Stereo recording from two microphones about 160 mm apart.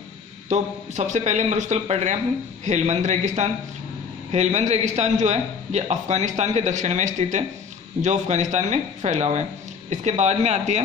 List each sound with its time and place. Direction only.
0.5 s a man's voice: 45° right (ahead or behind)